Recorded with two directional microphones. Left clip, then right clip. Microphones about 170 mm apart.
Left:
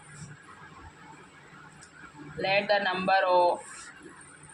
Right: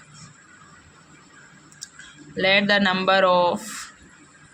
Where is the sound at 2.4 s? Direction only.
45° right (ahead or behind).